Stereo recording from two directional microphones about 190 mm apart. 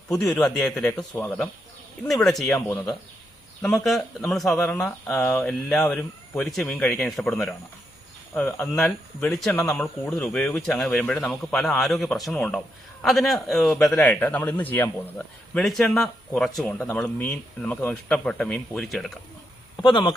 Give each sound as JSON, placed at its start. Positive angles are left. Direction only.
{"t": 0.1, "sound": "a man's voice", "side_deg": 5}
{"t": 1.1, "sound": "speech", "side_deg": 15}
{"t": 2.0, "sound": "a man's voice", "side_deg": 0}
{"t": 3.6, "sound": "a man's voice", "side_deg": 0}
{"t": 19.8, "sound": "speech", "side_deg": 25}